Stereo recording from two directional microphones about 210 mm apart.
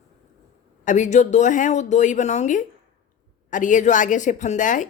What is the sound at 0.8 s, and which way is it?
Speech, 35° left (ahead or behind).